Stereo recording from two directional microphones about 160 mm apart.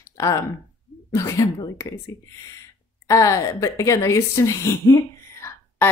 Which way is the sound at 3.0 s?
20° left (ahead or behind).